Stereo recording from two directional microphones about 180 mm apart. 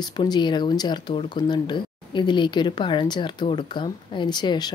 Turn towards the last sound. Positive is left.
turn(degrees=25)  # may be behind; listen again after turning